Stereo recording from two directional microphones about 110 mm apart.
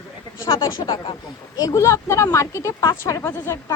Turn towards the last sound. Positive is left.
turn(degrees=25)  # may be behind; listen again after turning